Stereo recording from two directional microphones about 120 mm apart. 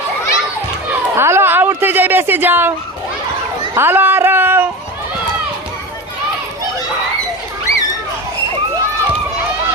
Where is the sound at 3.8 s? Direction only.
15° right (ahead or behind).